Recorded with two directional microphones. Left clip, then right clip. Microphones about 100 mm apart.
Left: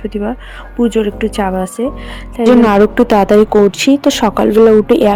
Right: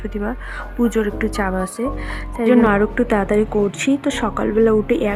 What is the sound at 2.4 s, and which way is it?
Speech, 70° left (ahead or behind).